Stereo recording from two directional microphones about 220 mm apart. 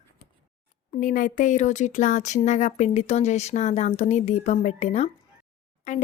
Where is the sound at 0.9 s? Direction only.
40° left (ahead or behind).